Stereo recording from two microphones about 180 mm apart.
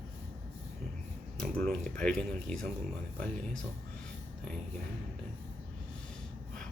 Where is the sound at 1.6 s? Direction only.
5° left (ahead or behind).